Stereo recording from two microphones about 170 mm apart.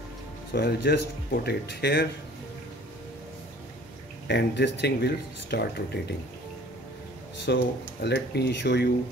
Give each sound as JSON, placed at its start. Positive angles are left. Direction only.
{"t": 0.5, "sound": "speech", "side_deg": 80}
{"t": 4.3, "sound": "speech", "side_deg": 90}
{"t": 7.4, "sound": "speech", "side_deg": 90}